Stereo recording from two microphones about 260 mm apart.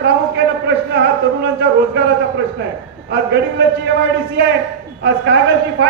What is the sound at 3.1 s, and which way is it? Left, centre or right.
Speech, right.